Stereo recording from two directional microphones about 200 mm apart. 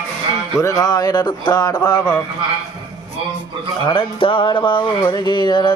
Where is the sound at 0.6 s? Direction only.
15° left (ahead or behind).